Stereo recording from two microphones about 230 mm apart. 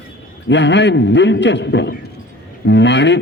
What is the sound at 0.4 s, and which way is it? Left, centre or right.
A man's voice, left.